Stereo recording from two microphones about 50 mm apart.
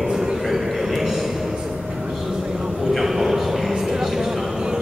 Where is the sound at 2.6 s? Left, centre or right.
Centre.